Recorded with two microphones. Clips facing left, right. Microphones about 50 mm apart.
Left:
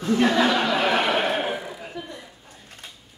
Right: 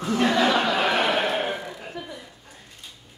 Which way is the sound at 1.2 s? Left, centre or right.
Centre.